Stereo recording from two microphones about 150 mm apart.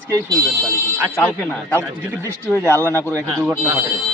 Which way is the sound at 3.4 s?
5° right (ahead or behind).